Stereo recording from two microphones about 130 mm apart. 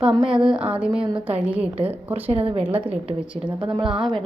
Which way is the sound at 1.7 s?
50° right (ahead or behind).